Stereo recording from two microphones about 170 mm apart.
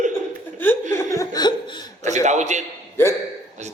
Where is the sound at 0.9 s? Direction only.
20° left (ahead or behind).